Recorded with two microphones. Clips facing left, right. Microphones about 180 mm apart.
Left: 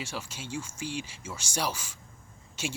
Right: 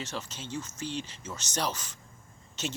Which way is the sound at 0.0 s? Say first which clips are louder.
Even; 10° left (ahead or behind).